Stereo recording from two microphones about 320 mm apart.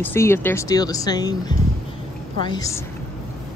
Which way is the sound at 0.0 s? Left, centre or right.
Centre.